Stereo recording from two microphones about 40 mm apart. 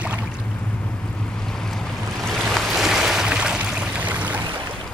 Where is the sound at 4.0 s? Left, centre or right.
Right.